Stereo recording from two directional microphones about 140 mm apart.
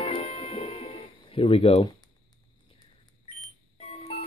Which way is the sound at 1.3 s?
40° left (ahead or behind).